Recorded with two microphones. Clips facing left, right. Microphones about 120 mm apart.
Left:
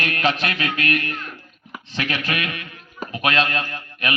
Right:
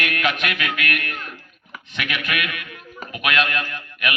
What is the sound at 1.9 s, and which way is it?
A man's voice, 30° left (ahead or behind).